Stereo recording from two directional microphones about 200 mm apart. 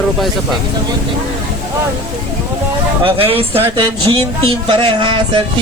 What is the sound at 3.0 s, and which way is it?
Speech, 25° right (ahead or behind).